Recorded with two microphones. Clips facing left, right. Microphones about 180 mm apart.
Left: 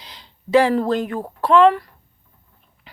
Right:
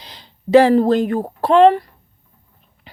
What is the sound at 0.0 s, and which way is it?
Speech, 35° right (ahead or behind).